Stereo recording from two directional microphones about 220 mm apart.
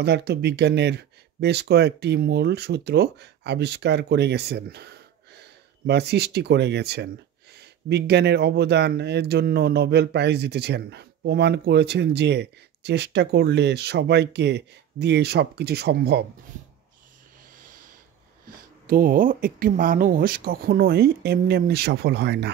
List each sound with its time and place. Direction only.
0.0 s speech: 50° right (ahead or behind)
17.6 s a sound: 35° right (ahead or behind)
18.9 s speech: 40° right (ahead or behind)